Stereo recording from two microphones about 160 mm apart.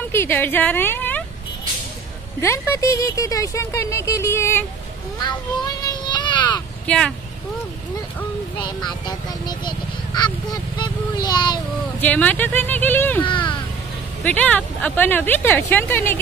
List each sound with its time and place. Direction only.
0.1 s a woman's voice: 15° left (ahead or behind)
2.4 s speech: 15° left (ahead or behind)
5.2 s a sound: 25° left (ahead or behind)
6.9 s speech: 5° left (ahead or behind)
9.0 s speech: 25° left (ahead or behind)
12.0 s speech: 10° left (ahead or behind)